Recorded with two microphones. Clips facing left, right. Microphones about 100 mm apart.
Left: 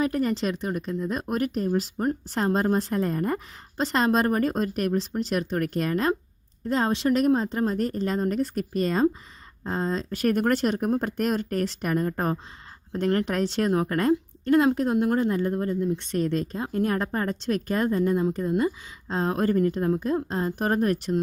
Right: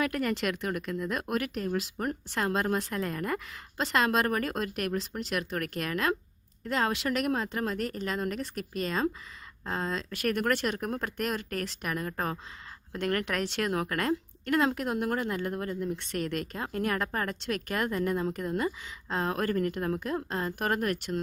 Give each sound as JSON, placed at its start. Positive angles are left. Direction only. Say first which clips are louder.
{"t": 0.0, "sound": "speech", "louder": "left 4 dB", "side_deg": 30}
{"t": 10.8, "sound": "a woman's voice", "louder": "left 8 dB", "side_deg": 30}
{"t": 11.2, "sound": "a woman's voice", "louder": "left 7 dB", "side_deg": 40}